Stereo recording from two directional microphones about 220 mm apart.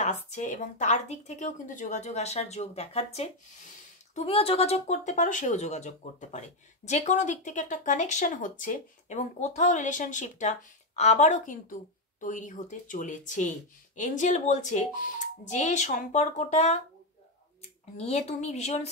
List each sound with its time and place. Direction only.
0.0 s a woman's voice: 30° left (ahead or behind)
17.9 s speech: 30° left (ahead or behind)